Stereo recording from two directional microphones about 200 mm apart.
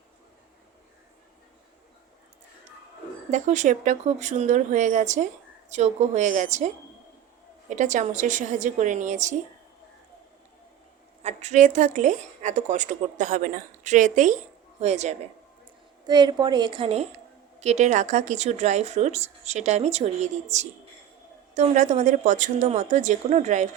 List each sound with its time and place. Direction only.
3.3 s a woman's voice: 35° right (ahead or behind)
11.2 s a woman's voice: 35° right (ahead or behind)
16.0 s a woman's voice: 20° right (ahead or behind)